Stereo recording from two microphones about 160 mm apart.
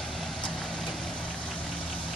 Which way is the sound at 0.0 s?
Centre (ahead or behind).